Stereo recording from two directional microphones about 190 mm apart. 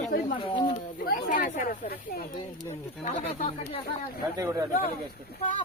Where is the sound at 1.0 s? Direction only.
45° left (ahead or behind).